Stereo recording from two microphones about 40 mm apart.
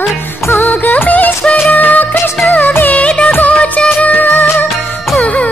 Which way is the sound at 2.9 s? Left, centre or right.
Left.